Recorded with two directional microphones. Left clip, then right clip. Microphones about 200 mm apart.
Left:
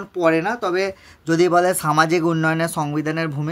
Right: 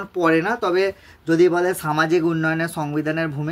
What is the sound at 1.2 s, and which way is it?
Speech, 35° left (ahead or behind).